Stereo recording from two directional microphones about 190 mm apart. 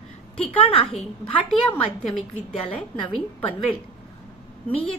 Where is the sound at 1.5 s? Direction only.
Centre (ahead or behind).